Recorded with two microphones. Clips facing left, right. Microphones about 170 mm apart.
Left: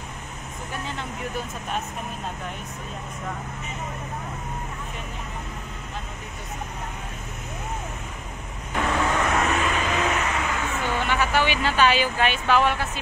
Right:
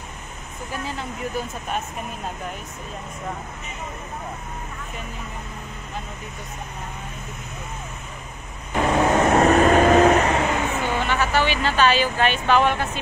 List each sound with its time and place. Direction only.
8.9 s vehicle: 40° right (ahead or behind)
9.2 s vehicle: 30° right (ahead or behind)
9.5 s vehicle: 45° right (ahead or behind)
11.1 s speech: 10° left (ahead or behind)